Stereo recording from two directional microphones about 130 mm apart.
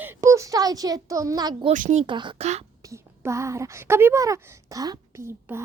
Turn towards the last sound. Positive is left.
turn(degrees=-20)  # may be behind; listen again after turning